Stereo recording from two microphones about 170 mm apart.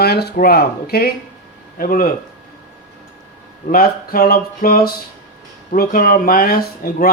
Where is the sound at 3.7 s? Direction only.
60° left (ahead or behind).